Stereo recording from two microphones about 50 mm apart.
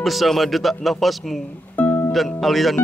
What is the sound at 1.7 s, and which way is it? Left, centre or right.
Music, left.